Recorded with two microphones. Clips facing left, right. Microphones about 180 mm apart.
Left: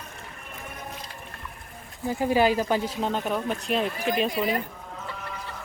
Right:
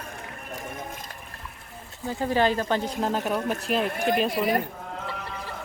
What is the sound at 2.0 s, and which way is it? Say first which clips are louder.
Speech: left 2 dB; 15° left (ahead or behind).